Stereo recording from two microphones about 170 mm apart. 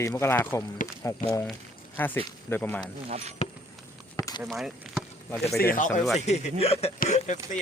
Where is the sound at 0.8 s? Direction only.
50° left (ahead or behind).